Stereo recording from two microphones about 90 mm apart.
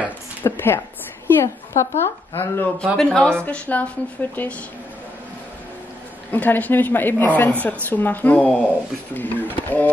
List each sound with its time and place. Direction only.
0.4 s a sound: 25° left (ahead or behind)
1.2 s speech: 30° left (ahead or behind)
2.8 s speech: 5° left (ahead or behind)
6.3 s speech: 20° left (ahead or behind)